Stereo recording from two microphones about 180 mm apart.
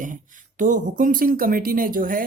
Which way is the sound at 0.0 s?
45° right (ahead or behind).